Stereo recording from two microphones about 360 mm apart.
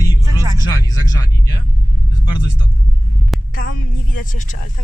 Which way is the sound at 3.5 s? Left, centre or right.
Left.